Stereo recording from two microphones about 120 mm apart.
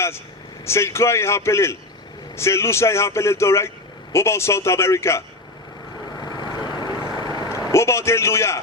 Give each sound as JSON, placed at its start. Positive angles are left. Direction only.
{"t": 0.6, "sound": "a man's voice", "side_deg": 25}
{"t": 6.1, "sound": "vehicle", "side_deg": 35}
{"t": 7.7, "sound": "a man's voice", "side_deg": 25}